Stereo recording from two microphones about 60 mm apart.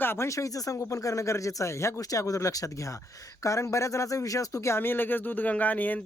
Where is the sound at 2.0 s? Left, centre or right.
Left.